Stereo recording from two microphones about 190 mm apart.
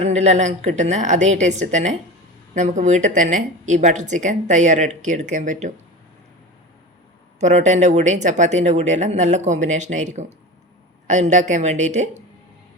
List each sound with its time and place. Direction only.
0.0 s speech: 35° right (ahead or behind)
7.3 s speech: 40° right (ahead or behind)